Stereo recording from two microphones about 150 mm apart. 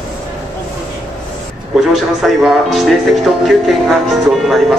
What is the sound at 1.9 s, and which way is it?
Speech, centre (ahead or behind).